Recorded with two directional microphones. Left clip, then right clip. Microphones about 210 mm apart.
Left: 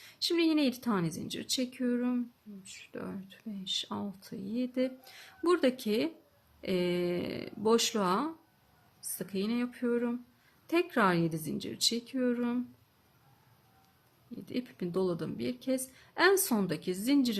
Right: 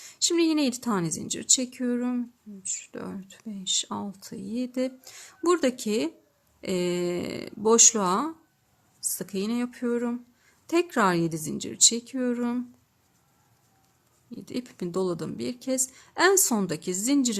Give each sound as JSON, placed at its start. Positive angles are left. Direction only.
{"t": 0.0, "sound": "speech", "side_deg": -30}
{"t": 14.3, "sound": "speech", "side_deg": -30}